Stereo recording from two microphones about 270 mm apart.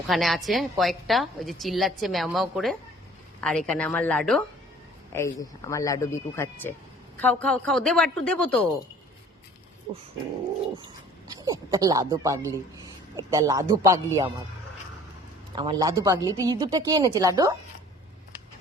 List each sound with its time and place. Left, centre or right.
0.1 s a woman's voice: centre
11.3 s speech: centre
15.5 s speech: centre